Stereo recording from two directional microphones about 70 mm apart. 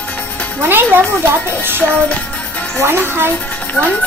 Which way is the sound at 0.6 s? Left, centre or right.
Right.